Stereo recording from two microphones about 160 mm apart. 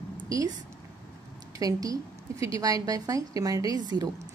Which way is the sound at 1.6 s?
20° right (ahead or behind).